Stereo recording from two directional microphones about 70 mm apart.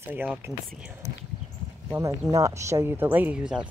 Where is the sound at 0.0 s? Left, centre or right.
Right.